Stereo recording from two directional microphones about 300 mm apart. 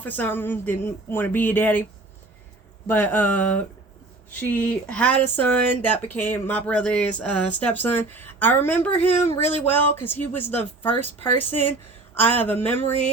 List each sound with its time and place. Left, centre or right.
0.0 s speech: centre
2.8 s speech: centre
9.0 s speech: left
9.9 s speech: centre